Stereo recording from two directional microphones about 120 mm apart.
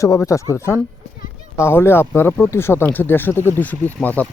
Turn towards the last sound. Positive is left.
turn(degrees=15)  # may be behind; listen again after turning